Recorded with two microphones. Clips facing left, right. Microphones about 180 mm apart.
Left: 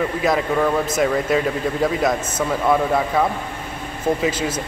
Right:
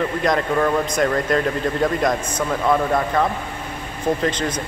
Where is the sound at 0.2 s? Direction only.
5° left (ahead or behind).